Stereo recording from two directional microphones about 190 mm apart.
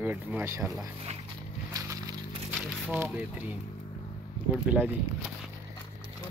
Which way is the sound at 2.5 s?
10° right (ahead or behind).